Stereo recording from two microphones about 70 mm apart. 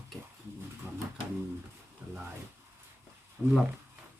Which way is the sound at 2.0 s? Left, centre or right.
Right.